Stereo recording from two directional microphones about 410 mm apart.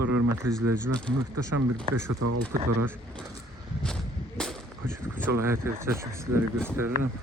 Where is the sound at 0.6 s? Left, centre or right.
Right.